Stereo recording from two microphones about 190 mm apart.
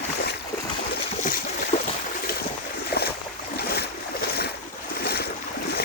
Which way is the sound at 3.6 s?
55° left (ahead or behind).